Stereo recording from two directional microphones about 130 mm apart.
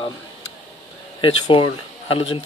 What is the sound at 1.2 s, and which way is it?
Speech, 40° left (ahead or behind).